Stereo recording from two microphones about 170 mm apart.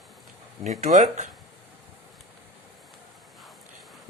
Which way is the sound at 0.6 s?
40° right (ahead or behind).